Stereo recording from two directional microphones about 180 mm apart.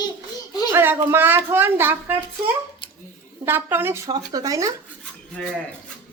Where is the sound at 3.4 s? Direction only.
10° right (ahead or behind).